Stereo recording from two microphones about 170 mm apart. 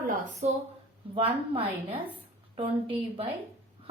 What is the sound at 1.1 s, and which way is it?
A woman's voice, 30° right (ahead or behind).